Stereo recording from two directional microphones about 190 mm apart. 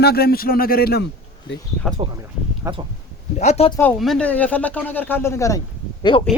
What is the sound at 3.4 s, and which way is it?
Speech, 35° left (ahead or behind).